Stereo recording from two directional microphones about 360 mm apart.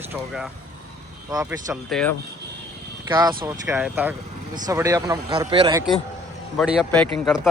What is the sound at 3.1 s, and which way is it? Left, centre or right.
Speech, centre.